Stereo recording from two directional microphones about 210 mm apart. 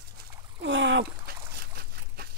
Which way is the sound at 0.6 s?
60° right (ahead or behind).